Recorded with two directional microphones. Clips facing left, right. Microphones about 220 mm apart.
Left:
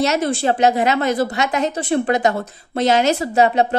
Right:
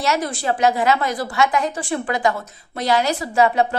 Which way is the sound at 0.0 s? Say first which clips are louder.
Left 4 dB; 25° left (ahead or behind).